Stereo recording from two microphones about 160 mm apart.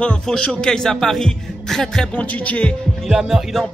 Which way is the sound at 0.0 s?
5° left (ahead or behind).